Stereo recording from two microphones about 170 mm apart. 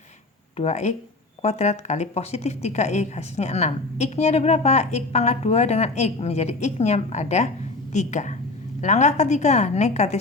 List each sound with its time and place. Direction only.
0.5 s a woman's voice: 40° left (ahead or behind)